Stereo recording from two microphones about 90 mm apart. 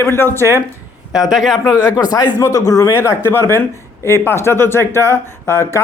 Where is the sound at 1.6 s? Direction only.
45° left (ahead or behind).